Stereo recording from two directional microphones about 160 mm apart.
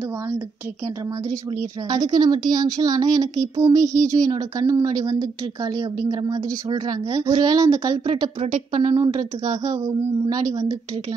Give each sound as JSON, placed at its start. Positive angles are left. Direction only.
{"t": 1.9, "sound": "a woman's voice", "side_deg": -25}
{"t": 8.4, "sound": "speech", "side_deg": -55}
{"t": 8.8, "sound": "a woman's voice", "side_deg": -30}